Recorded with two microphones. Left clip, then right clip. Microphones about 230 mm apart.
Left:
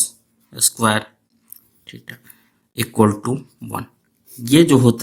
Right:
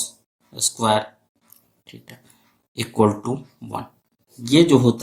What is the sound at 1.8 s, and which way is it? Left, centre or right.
Speech, left.